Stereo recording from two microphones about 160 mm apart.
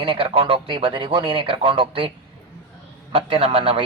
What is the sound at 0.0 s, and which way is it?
A man's voice, 35° right (ahead or behind).